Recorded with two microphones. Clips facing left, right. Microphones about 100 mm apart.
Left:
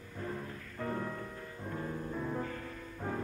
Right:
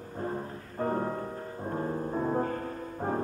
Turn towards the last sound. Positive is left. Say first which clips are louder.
# right 7 dB
turn(degrees=-40)  # may be behind; listen again after turning